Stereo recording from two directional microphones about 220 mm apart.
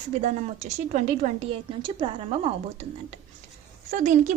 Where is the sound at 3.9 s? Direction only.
35° right (ahead or behind).